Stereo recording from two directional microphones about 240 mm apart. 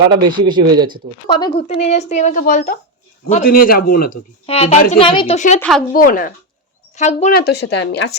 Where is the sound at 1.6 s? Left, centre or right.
Left.